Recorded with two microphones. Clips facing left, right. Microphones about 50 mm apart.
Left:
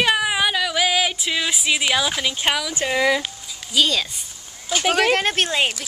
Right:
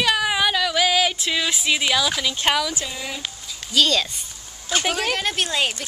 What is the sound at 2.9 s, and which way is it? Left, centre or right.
Speech, left.